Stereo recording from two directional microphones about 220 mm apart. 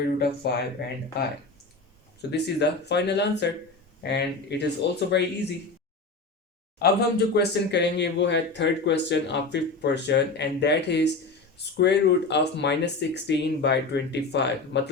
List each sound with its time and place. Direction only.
0.0 s speech: 45° left (ahead or behind)
2.3 s speech: 50° left (ahead or behind)
6.8 s speech: 45° left (ahead or behind)